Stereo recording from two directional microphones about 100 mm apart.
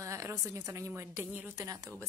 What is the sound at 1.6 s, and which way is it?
Speech, 30° right (ahead or behind).